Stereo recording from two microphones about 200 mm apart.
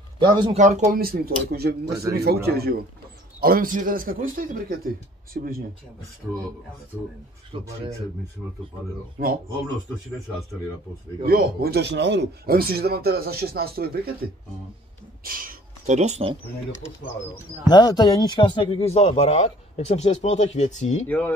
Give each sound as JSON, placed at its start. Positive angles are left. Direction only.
{"t": 0.2, "sound": "speech", "side_deg": -20}
{"t": 0.6, "sound": "speech", "side_deg": -35}
{"t": 7.5, "sound": "speech", "side_deg": -25}
{"t": 9.2, "sound": "speech", "side_deg": -45}
{"t": 11.2, "sound": "speech", "side_deg": -50}
{"t": 15.2, "sound": "speech", "side_deg": -45}
{"t": 17.6, "sound": "speech", "side_deg": 20}